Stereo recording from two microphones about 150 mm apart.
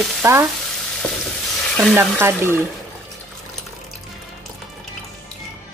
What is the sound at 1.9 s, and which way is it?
Speech, 15° right (ahead or behind).